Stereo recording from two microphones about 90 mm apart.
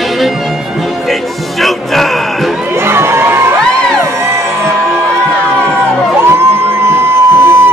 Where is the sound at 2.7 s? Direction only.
30° right (ahead or behind).